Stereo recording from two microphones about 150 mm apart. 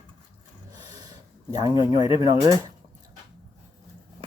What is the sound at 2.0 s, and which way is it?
Speech, 25° right (ahead or behind).